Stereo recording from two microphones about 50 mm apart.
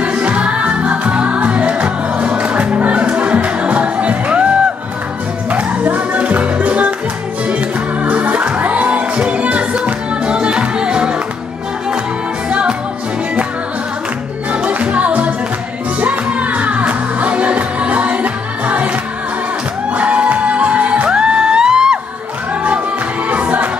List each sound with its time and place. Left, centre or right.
0.0 s music: right
5.5 s music: right
8.0 s music: right
12.4 s music: right
14.5 s music: right
19.9 s music: right
23.3 s music: right